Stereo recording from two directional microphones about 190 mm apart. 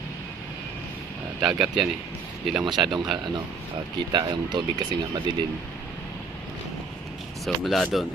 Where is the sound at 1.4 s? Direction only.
5° right (ahead or behind).